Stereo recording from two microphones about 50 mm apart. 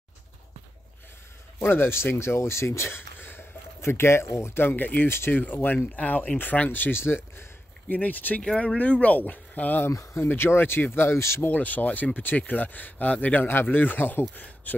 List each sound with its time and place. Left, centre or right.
1.6 s speech: left
3.2 s a sound: left
3.8 s speech: left
6.7 s speech: left
7.9 s speech: left
8.4 s speech: centre
9.8 s speech: left
11.1 s speech: left
11.4 s speech: left